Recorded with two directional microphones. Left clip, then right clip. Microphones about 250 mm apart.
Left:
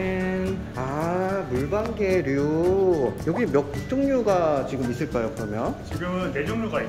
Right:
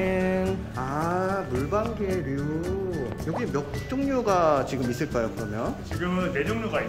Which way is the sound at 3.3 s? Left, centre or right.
Centre.